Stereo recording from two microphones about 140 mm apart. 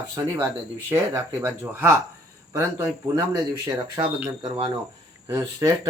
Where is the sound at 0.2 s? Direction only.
20° right (ahead or behind).